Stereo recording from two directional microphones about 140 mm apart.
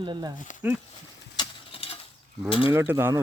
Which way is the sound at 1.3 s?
35° left (ahead or behind).